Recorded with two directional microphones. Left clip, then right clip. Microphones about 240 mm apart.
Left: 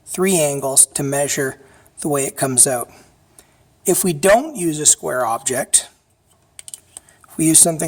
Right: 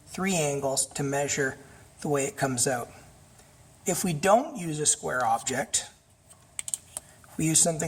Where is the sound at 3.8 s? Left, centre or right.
Left.